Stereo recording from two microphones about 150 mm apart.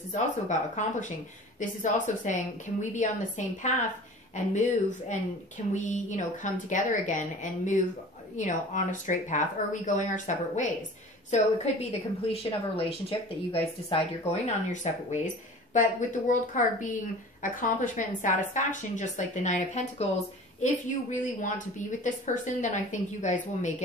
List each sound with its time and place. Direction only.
0.1 s speech: 55° left (ahead or behind)
5.8 s speech: 55° left (ahead or behind)